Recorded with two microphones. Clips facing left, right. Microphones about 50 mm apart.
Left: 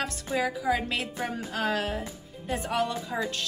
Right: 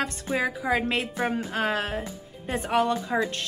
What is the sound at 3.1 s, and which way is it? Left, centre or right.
Speech, right.